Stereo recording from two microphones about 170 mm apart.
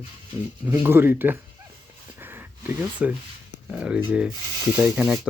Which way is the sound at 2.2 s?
10° right (ahead or behind).